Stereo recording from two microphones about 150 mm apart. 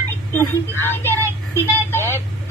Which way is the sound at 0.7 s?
15° left (ahead or behind).